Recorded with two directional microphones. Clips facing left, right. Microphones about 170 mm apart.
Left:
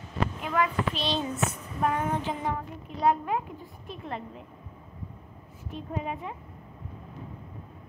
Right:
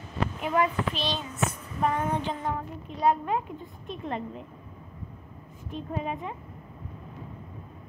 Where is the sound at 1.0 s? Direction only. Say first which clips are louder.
Left 1 dB; 25° left (ahead or behind).